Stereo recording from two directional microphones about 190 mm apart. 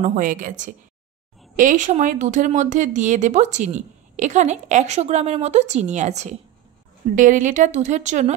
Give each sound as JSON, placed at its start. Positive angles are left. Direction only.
{"t": 0.0, "sound": "a woman's voice", "side_deg": -45}